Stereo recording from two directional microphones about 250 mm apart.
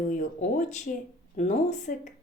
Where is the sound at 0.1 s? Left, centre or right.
Left.